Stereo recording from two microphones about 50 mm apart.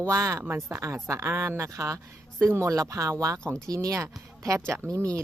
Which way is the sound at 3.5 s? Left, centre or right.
Right.